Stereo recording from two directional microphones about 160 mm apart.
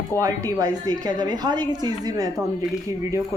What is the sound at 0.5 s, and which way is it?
Speech, 25° right (ahead or behind).